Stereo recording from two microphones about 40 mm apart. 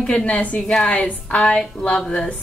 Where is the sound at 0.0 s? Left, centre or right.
Left.